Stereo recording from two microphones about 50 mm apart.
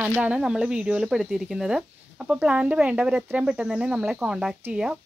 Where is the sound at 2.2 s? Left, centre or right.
Right.